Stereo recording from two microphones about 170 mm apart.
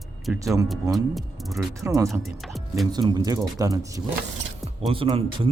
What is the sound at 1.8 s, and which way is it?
Speech, 20° right (ahead or behind).